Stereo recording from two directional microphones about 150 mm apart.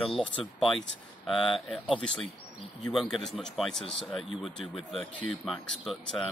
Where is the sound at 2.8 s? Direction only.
Centre (ahead or behind).